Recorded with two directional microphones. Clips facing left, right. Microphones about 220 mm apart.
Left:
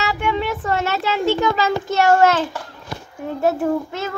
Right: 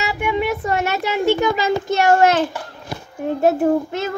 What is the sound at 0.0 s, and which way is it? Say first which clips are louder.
A child's voice: right 1 dB; 10° right (ahead or behind).